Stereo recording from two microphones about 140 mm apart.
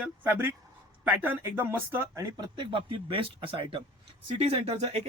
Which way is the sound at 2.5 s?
40° right (ahead or behind).